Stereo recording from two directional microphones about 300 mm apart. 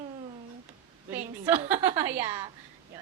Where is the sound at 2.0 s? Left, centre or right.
Centre.